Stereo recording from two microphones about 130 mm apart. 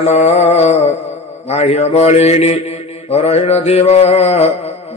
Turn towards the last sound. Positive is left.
turn(degrees=55)  # may be behind; listen again after turning